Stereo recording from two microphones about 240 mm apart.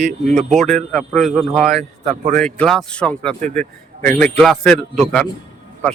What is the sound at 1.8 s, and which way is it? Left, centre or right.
Speech, right.